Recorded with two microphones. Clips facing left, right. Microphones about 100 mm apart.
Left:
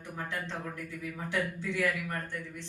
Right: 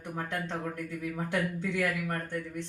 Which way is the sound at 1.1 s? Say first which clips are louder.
Right 1 dB; 50° right (ahead or behind).